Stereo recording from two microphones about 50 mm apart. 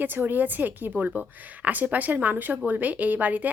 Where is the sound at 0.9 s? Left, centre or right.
Right.